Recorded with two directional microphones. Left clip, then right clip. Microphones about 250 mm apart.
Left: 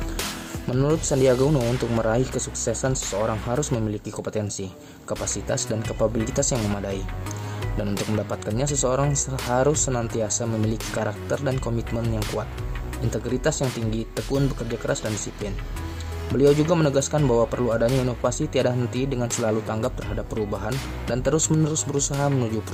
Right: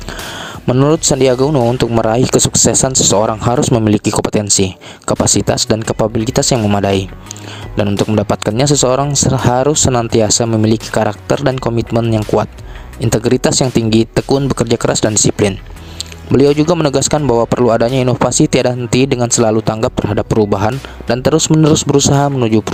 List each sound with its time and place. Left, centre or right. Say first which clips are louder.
0.8 s speech: right 10 dB; right